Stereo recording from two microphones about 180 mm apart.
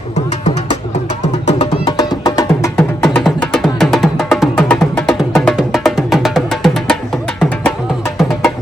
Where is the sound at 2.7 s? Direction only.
5° left (ahead or behind).